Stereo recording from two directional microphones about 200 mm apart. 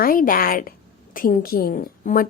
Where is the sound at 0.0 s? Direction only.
45° left (ahead or behind).